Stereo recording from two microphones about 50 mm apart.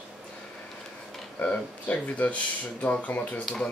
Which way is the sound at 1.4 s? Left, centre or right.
Left.